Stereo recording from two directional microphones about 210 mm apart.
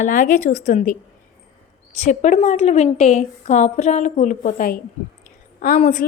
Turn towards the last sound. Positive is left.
turn(degrees=40)  # may be behind; listen again after turning